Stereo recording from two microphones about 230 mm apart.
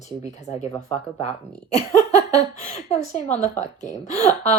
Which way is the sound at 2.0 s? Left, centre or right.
Centre.